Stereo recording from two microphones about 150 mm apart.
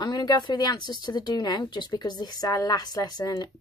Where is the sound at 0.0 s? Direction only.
25° left (ahead or behind).